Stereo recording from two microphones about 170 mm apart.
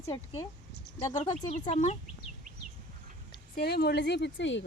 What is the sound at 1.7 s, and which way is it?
Speech, 40° left (ahead or behind).